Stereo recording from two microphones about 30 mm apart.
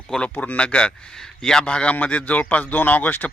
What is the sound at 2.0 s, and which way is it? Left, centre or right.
Speech, left.